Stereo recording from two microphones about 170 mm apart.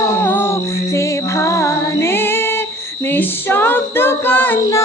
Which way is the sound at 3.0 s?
10° left (ahead or behind).